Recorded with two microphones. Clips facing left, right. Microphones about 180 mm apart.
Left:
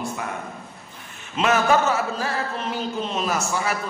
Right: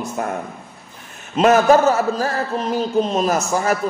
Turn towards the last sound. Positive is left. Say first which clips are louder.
# right 6 dB
turn(degrees=-40)  # may be behind; listen again after turning